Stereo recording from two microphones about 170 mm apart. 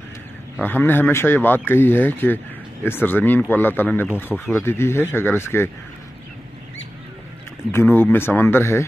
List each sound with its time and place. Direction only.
0.6 s speech: 10° left (ahead or behind)
4.3 s speech: centre (ahead or behind)
4.6 s speech: 15° left (ahead or behind)
7.7 s speech: 10° left (ahead or behind)